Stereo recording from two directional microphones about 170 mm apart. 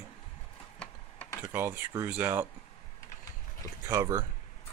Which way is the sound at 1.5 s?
10° right (ahead or behind).